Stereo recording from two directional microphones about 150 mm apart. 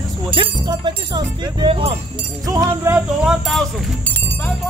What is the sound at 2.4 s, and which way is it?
Speech, 20° right (ahead or behind).